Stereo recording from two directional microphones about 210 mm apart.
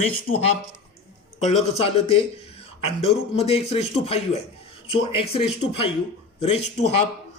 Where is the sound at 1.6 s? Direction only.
30° left (ahead or behind).